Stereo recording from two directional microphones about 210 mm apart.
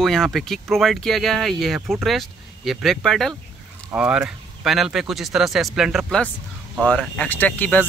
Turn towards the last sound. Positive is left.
turn(degrees=10)  # may be behind; listen again after turning